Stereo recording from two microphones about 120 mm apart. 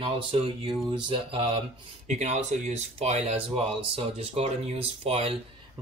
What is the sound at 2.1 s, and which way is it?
Speech, 75° right (ahead or behind).